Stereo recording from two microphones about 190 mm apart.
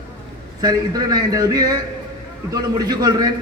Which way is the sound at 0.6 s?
20° right (ahead or behind).